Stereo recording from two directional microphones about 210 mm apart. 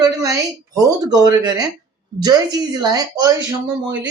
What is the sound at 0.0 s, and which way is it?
A woman's voice, 15° right (ahead or behind).